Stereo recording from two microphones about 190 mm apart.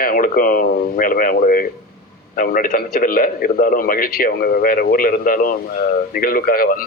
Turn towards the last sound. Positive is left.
turn(degrees=50)  # may be behind; listen again after turning